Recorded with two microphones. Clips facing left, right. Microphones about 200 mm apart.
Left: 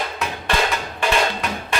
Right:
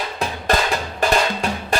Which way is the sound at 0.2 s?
35° right (ahead or behind).